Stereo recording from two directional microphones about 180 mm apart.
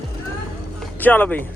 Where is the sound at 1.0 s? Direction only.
10° left (ahead or behind).